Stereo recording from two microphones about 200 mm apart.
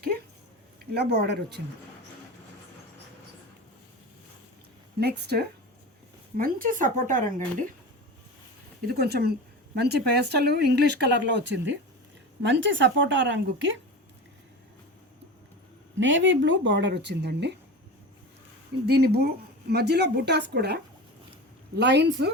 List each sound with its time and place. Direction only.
0.9 s speech: 55° right (ahead or behind)
4.9 s speech: 55° right (ahead or behind)
6.3 s speech: 45° right (ahead or behind)
8.9 s speech: 50° right (ahead or behind); by 13.7 s 70° right (ahead or behind)
16.0 s speech: 70° right (ahead or behind)
18.9 s speech: 50° right (ahead or behind)